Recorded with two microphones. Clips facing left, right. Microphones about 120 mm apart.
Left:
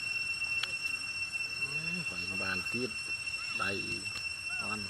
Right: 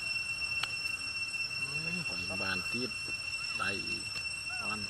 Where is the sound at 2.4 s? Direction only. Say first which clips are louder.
Left 2 dB; 10° right (ahead or behind).